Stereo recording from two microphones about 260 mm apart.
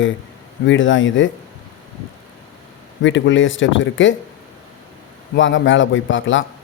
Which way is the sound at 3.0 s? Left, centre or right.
Left.